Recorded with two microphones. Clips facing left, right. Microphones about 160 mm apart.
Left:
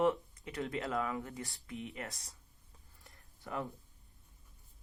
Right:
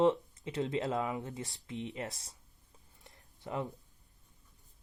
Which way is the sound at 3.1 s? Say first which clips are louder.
Right 3 dB; 20° right (ahead or behind).